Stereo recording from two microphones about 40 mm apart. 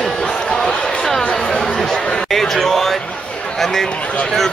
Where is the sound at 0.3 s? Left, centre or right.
Left.